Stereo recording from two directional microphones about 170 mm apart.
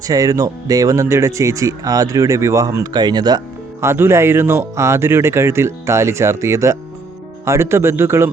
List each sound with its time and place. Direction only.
0.1 s speech: 20° right (ahead or behind)